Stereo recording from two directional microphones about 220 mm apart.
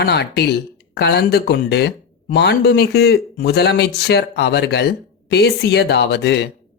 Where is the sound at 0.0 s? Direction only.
50° left (ahead or behind).